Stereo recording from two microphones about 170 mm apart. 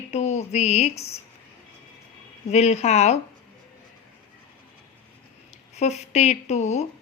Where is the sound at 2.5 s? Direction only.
40° left (ahead or behind).